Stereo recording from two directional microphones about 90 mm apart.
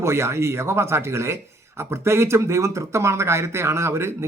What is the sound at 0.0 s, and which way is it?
Speech, 30° right (ahead or behind).